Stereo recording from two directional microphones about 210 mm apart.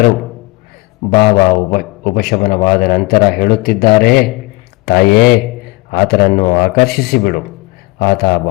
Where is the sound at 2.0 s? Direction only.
45° left (ahead or behind).